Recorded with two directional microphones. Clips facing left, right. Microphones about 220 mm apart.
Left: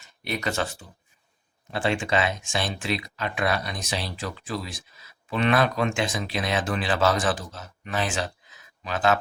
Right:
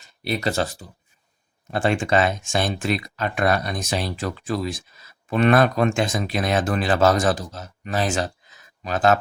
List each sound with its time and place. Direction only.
0.3 s speech: 35° right (ahead or behind)
1.7 s speech: 45° right (ahead or behind)